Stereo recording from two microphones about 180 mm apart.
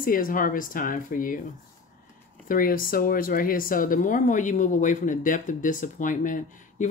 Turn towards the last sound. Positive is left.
turn(degrees=45)  # may be behind; listen again after turning